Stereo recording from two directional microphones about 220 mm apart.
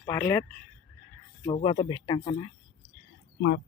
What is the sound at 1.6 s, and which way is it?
Speech, 25° left (ahead or behind).